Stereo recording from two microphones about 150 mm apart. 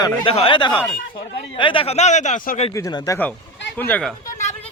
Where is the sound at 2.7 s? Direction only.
25° left (ahead or behind).